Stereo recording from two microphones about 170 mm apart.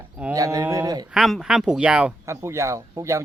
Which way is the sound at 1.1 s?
Centre (ahead or behind).